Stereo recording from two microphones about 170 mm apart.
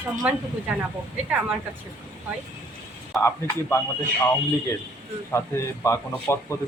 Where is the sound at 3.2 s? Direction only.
15° left (ahead or behind).